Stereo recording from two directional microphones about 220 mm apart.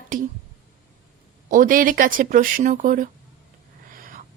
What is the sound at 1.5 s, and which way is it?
A woman's voice, 40° right (ahead or behind).